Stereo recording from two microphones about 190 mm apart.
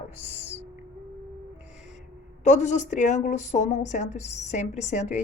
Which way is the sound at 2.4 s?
40° left (ahead or behind).